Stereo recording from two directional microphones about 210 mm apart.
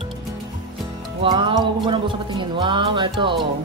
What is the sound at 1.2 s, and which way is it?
Music, 20° right (ahead or behind).